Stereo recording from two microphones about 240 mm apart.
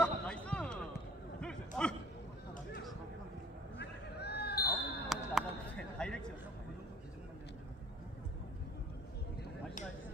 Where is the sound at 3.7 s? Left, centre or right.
Left.